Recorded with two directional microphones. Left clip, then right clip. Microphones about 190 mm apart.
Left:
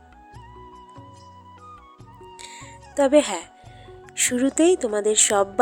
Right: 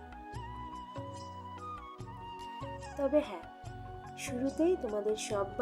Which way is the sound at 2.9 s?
40° left (ahead or behind).